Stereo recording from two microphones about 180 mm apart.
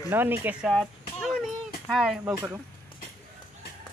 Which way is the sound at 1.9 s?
Centre (ahead or behind).